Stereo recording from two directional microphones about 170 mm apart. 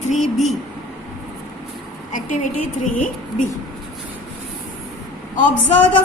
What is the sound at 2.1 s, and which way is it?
A woman's voice, 50° left (ahead or behind).